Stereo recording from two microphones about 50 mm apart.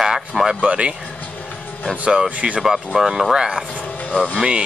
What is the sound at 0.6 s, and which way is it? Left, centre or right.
Speech, right.